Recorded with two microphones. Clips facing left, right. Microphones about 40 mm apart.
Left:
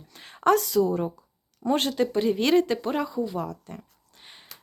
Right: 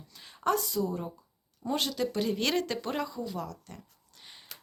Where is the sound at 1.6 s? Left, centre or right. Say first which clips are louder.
Left 7 dB; left.